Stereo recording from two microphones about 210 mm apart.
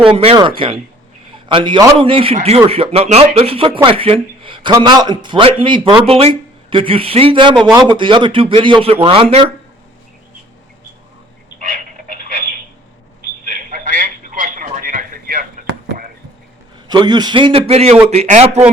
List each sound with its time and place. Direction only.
0.1 s a man's voice: 25° right (ahead or behind)
13.5 s telephone: 40° right (ahead or behind)
16.9 s a man's voice: 20° right (ahead or behind)